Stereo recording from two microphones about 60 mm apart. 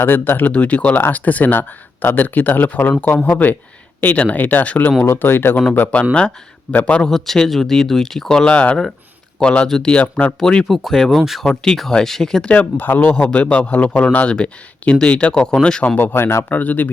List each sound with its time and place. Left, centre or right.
0.0 s speech: left
0.5 s speech: left
5.0 s speech: left
5.7 s speech: left
7.1 s speech: centre
9.6 s speech: centre
9.9 s speech: left
10.4 s speech: centre
10.7 s speech: centre
12.5 s speech: left
16.0 s speech: left